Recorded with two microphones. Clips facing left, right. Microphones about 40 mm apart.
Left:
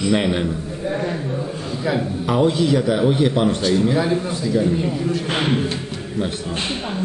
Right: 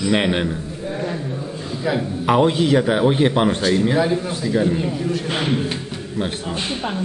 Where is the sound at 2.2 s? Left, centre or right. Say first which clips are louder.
Right 2 dB; right.